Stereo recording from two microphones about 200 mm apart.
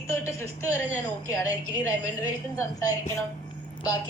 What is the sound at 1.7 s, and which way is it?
Speech, 20° left (ahead or behind).